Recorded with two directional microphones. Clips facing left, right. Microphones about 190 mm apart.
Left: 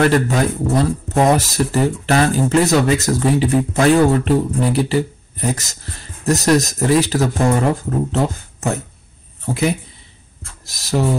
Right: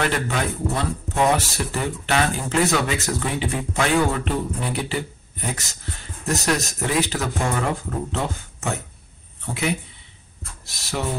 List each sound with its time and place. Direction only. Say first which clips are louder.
0.0 s speech: left 8 dB; 40° left (ahead or behind)